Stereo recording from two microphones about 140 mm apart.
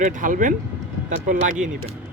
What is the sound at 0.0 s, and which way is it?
Speech, 70° right (ahead or behind).